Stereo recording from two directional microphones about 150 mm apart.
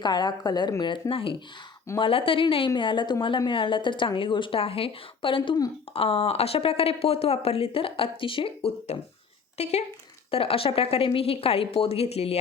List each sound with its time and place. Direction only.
0.0 s a woman's voice: 30° left (ahead or behind)
5.9 s a woman's voice: 40° left (ahead or behind)